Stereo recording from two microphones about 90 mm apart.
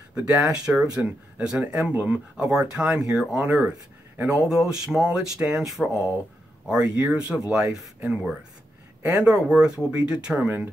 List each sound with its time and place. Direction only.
0.1 s speech: 10° right (ahead or behind)
3.4 s speech: 15° right (ahead or behind)